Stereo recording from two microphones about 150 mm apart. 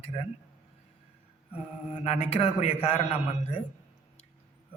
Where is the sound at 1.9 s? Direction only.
50° left (ahead or behind).